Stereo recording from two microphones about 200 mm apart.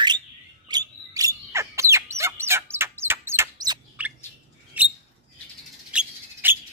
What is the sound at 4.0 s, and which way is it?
Chirp, 5° right (ahead or behind).